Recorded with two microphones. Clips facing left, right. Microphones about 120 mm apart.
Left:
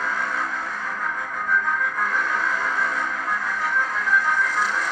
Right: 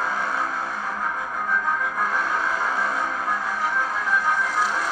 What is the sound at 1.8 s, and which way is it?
Music, 25° right (ahead or behind).